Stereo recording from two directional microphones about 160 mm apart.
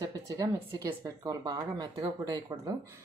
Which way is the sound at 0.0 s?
20° right (ahead or behind).